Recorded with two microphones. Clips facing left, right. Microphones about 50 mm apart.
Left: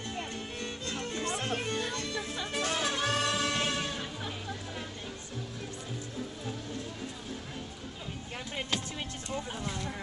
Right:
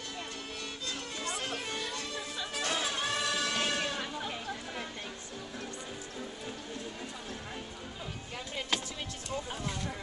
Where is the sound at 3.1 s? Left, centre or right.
Left.